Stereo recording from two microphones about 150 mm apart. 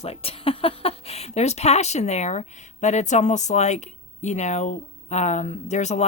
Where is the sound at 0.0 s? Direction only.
40° left (ahead or behind).